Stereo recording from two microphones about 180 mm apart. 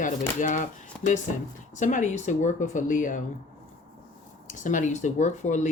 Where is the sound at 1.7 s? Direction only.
45° left (ahead or behind).